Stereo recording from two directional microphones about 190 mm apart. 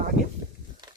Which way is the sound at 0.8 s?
20° right (ahead or behind).